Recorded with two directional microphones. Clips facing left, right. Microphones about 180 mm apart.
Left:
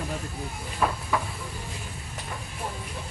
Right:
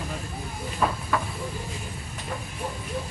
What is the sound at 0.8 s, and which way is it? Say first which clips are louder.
Hiss: right 1 dB; centre (ahead or behind).